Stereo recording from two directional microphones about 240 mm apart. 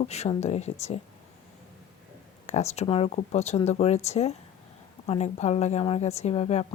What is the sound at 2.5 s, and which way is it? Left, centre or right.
A woman's voice, left.